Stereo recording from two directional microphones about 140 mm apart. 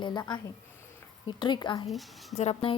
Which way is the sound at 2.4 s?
50° left (ahead or behind).